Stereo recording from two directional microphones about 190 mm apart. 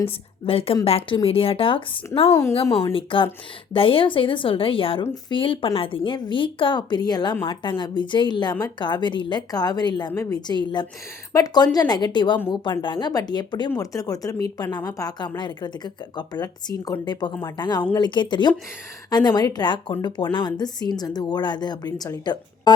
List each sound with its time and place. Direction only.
0.4 s a woman's voice: 30° left (ahead or behind)
2.9 s a woman's voice: 25° left (ahead or behind)